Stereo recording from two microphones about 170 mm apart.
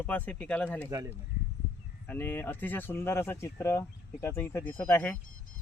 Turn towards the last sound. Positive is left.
turn(degrees=5)  # may be behind; listen again after turning